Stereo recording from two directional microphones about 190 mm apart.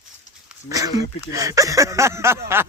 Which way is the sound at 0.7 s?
20° right (ahead or behind).